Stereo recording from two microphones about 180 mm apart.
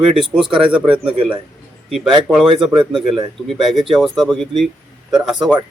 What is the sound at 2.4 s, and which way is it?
Speech, 30° right (ahead or behind).